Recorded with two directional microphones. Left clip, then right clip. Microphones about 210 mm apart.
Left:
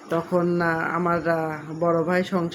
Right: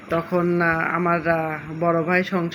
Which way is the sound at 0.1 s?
10° left (ahead or behind).